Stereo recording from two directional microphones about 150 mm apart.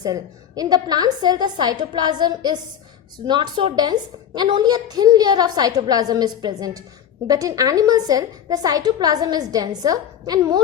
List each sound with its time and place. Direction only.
0.0 s a woman's voice: 25° right (ahead or behind)